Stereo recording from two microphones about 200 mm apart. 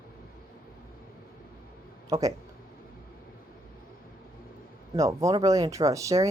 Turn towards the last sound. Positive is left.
turn(degrees=-15)  # may be behind; listen again after turning